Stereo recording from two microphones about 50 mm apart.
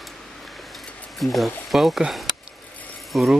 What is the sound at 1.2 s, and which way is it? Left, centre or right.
Speech, centre.